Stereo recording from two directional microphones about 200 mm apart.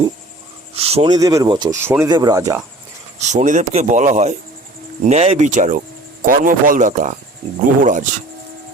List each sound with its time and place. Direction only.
0.8 s speech: 30° right (ahead or behind)
3.2 s speech: 35° right (ahead or behind)